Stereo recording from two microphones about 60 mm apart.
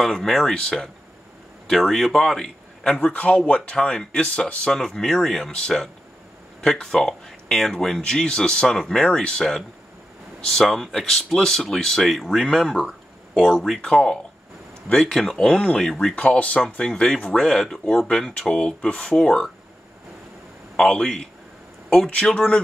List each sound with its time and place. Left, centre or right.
0.0 s speech: centre
3.0 s speech: left; by 12.9 s centre
13.7 s speech: centre
16.2 s speech: left
20.7 s speech: centre